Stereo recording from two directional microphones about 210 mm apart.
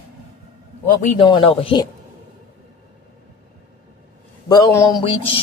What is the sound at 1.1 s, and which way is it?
Speech, 25° left (ahead or behind).